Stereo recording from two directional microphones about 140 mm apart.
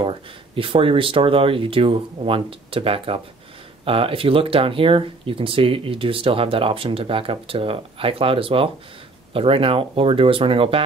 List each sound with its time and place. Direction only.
0.0 s speech: 40° right (ahead or behind)